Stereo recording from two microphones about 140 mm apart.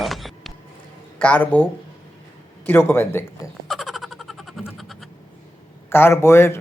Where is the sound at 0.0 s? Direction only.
Centre (ahead or behind).